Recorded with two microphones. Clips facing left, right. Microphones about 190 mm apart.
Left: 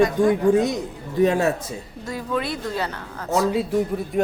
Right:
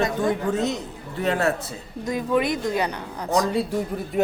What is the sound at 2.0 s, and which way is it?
Speech, 15° right (ahead or behind).